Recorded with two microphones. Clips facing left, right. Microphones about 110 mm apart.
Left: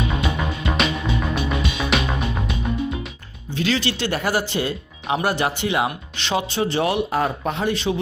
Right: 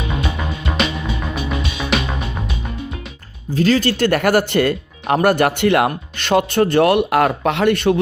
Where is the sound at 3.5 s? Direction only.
40° right (ahead or behind).